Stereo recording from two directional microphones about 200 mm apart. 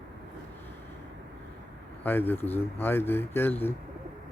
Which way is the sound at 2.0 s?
10° left (ahead or behind).